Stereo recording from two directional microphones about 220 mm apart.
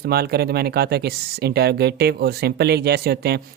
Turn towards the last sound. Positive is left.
turn(degrees=-45)  # may be behind; listen again after turning